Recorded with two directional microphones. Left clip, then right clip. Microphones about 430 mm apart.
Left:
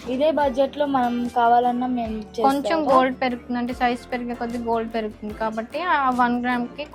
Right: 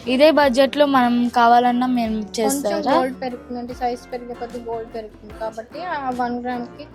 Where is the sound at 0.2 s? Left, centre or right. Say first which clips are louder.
Right 6 dB; right.